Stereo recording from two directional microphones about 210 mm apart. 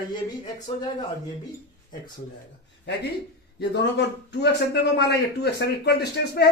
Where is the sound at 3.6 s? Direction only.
55° left (ahead or behind).